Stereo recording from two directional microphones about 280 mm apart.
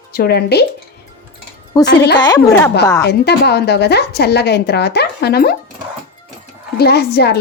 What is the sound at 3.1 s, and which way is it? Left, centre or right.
Speech, left.